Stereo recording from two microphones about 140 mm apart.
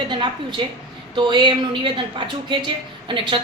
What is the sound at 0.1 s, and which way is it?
A woman's voice, 35° right (ahead or behind).